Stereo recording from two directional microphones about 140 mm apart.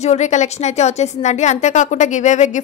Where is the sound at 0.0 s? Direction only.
55° left (ahead or behind).